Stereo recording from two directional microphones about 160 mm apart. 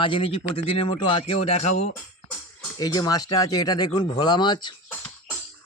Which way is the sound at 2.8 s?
25° left (ahead or behind).